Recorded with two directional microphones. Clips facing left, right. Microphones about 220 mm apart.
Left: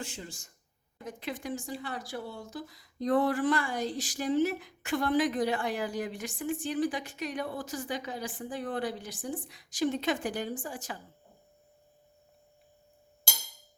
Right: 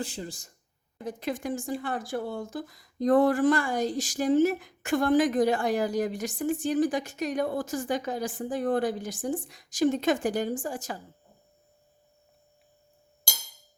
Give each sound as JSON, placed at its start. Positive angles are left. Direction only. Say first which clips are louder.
{"t": 0.0, "sound": "speech", "louder": "right 6 dB", "side_deg": -35}
{"t": 1.3, "sound": "a woman's voice", "louder": "right 5 dB", "side_deg": -50}